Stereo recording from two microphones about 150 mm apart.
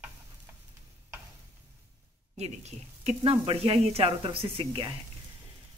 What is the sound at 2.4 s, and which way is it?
A woman's voice, 45° right (ahead or behind).